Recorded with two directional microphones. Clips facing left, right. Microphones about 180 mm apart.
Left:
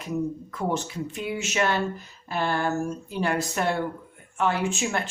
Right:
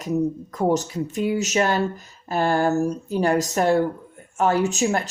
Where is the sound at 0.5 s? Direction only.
40° right (ahead or behind).